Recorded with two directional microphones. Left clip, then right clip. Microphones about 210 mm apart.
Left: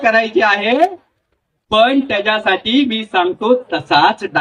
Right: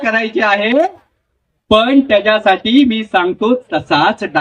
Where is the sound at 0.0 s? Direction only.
30° right (ahead or behind).